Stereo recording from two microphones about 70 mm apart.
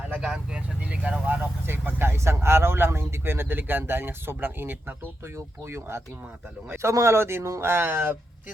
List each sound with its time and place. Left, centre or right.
0.1 s speech: centre; by 7.9 s right